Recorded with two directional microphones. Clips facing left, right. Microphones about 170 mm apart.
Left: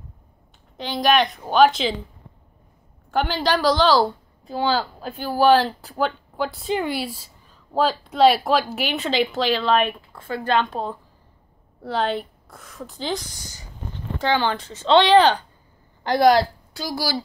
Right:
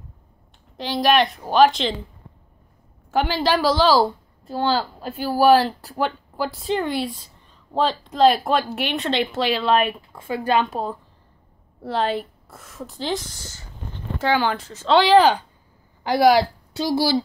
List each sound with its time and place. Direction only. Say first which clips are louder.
0.7 s a woman's voice: right 1 dB; centre (ahead or behind)
3.1 s a woman's voice: right 1 dB; 5° right (ahead or behind)
13.4 s speech: right 1 dB; 15° left (ahead or behind)
14.1 s a woman's voice: right 1 dB; 5° right (ahead or behind)
16.7 s speech: right 6 dB; 25° right (ahead or behind)